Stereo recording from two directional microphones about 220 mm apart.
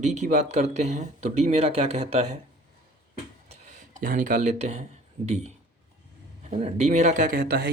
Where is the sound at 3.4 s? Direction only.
30° right (ahead or behind).